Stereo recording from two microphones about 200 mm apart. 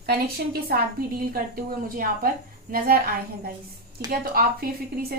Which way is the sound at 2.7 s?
45° right (ahead or behind).